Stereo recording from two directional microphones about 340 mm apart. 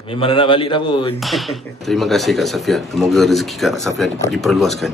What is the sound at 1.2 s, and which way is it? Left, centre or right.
Speech, centre.